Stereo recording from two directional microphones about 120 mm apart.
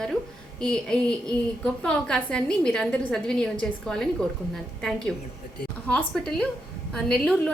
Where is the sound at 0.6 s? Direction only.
5° left (ahead or behind).